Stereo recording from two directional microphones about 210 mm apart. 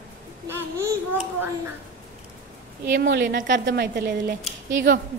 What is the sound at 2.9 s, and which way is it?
A woman's voice, 50° right (ahead or behind).